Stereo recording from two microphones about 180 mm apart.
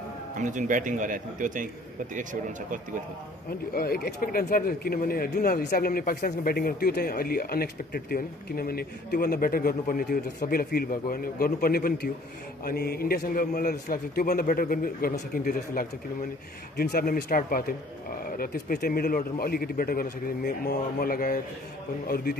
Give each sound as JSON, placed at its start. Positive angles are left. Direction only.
{"t": 0.4, "sound": "speech", "side_deg": -45}
{"t": 3.4, "sound": "speech", "side_deg": 55}